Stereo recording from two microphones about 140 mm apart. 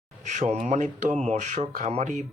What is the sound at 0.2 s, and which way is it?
Speech, 60° right (ahead or behind).